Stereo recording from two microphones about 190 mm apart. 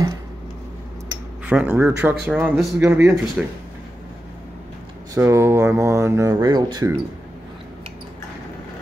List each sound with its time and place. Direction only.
1.4 s speech: 10° right (ahead or behind)
3.4 s speech: 5° right (ahead or behind)
5.1 s speech: 15° right (ahead or behind)